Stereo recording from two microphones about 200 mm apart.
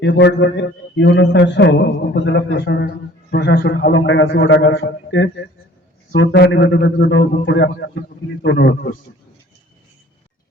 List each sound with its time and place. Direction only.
0.0 s a man's voice: 60° left (ahead or behind)